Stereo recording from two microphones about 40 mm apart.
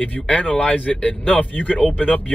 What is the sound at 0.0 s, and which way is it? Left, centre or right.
Speech, left.